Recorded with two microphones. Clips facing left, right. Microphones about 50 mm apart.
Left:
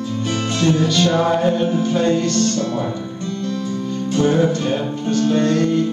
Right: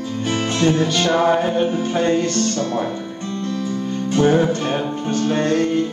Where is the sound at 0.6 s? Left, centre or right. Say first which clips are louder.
Left 1 dB; right.